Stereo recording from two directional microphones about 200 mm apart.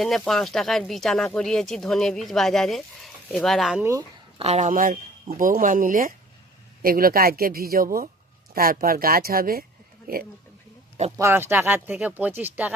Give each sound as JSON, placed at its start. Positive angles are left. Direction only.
{"t": 0.0, "sound": "speech", "side_deg": 0}
{"t": 4.4, "sound": "speech", "side_deg": -35}
{"t": 11.2, "sound": "speech", "side_deg": -10}